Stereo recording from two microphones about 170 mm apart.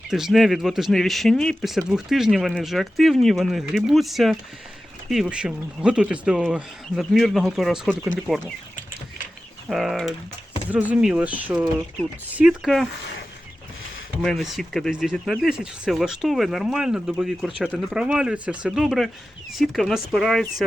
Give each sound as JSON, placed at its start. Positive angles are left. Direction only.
{"t": 0.1, "sound": "speech", "side_deg": 0}
{"t": 9.6, "sound": "speech", "side_deg": 0}
{"t": 14.2, "sound": "speech", "side_deg": 0}